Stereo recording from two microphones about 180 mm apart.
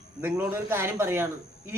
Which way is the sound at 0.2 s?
10° right (ahead or behind).